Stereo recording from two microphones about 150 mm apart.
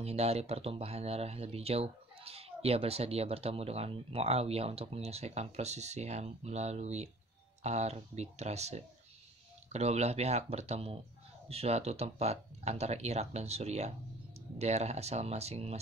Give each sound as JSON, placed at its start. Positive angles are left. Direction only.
{"t": 0.0, "sound": "speech", "side_deg": -45}